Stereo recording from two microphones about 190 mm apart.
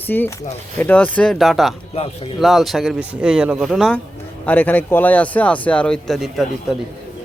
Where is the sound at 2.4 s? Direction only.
Centre (ahead or behind).